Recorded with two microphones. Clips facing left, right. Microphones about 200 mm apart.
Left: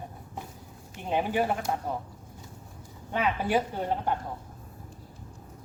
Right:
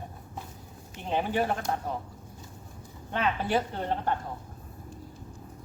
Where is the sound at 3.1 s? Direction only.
10° left (ahead or behind).